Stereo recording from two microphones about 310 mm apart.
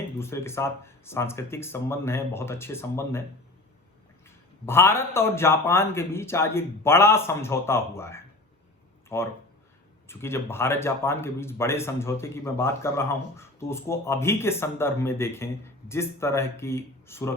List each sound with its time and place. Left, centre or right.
0.2 s a man's voice: centre
4.6 s a man's voice: centre